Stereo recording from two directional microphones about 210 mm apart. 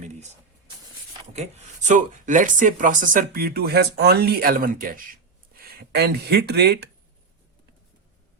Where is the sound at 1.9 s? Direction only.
35° right (ahead or behind).